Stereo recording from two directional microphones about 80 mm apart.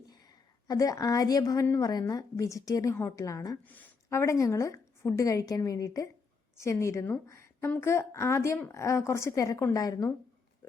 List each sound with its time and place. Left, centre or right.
0.1 s a sound: left
1.8 s a woman's voice: left
3.6 s a woman's voice: left
4.1 s a woman's voice: left
6.6 s a woman's voice: left